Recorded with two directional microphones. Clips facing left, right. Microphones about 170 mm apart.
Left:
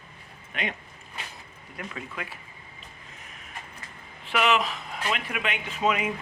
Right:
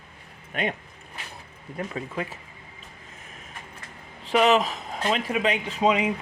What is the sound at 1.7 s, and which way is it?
Speech, 35° right (ahead or behind).